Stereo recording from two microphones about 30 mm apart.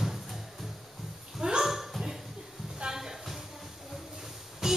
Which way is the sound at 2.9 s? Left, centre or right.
Right.